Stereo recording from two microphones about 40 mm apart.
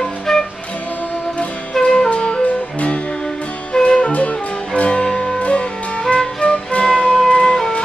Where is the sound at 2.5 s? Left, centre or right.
Left.